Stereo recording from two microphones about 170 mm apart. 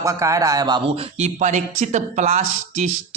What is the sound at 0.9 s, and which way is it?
Speech, 45° right (ahead or behind).